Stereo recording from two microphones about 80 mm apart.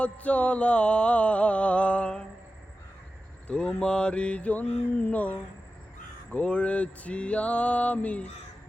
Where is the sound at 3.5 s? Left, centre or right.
Centre.